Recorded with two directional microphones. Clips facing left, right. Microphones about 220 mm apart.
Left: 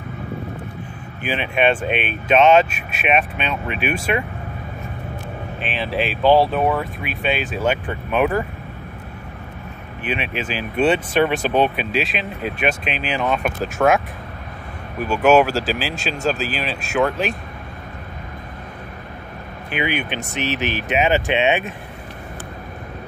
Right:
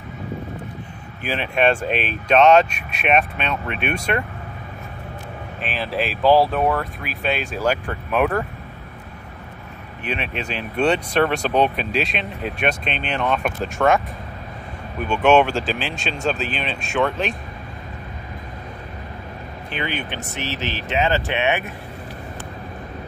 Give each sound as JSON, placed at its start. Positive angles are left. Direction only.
{"t": 1.2, "sound": "speech", "side_deg": 0}
{"t": 5.6, "sound": "speech", "side_deg": 0}
{"t": 10.0, "sound": "speech", "side_deg": 5}
{"t": 19.7, "sound": "speech", "side_deg": 15}